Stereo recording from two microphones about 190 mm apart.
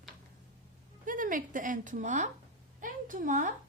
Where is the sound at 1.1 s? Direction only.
45° right (ahead or behind).